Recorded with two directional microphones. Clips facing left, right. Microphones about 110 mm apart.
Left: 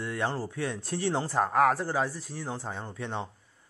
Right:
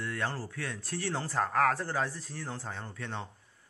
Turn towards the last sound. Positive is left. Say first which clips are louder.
# left 4 dB
turn(degrees=20)  # may be behind; listen again after turning